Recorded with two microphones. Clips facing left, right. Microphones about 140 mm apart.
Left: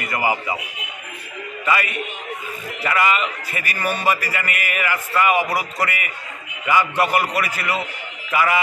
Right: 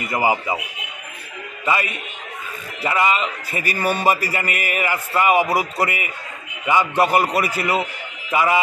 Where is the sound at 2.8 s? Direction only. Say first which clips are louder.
Right 1 dB; 25° right (ahead or behind).